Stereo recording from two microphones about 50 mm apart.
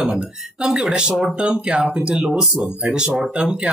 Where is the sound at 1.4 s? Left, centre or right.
Right.